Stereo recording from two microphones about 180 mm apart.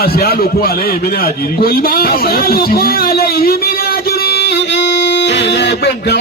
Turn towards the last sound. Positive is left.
turn(degrees=70)  # may be behind; listen again after turning